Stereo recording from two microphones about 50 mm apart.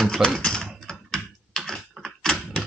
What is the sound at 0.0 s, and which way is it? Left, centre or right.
Typing, centre.